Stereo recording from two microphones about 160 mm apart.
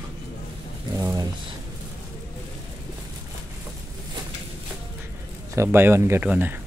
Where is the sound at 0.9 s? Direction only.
20° right (ahead or behind).